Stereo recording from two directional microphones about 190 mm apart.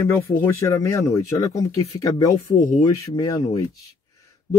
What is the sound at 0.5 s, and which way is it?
Speech, 15° left (ahead or behind).